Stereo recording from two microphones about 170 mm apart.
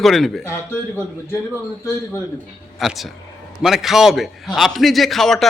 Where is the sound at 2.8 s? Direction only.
Centre (ahead or behind).